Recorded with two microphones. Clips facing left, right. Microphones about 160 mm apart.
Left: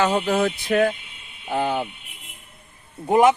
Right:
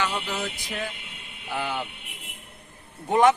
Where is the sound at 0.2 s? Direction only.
60° left (ahead or behind).